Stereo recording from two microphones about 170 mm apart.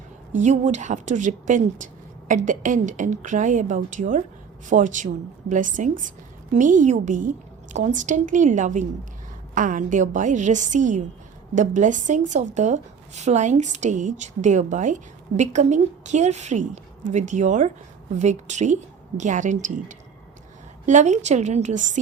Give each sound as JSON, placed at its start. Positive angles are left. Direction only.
{"t": 0.3, "sound": "a woman's voice", "side_deg": -45}